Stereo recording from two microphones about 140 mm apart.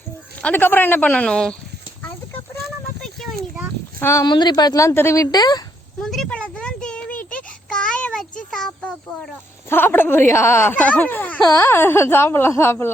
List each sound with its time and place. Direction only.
0.4 s speech: 15° left (ahead or behind)
4.0 s a woman's voice: 20° left (ahead or behind)
4.3 s a woman's voice: 30° left (ahead or behind)
6.0 s a sound: centre (ahead or behind)
9.6 s speech: 15° left (ahead or behind)